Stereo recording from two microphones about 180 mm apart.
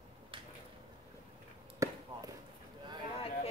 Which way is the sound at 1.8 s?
15° right (ahead or behind).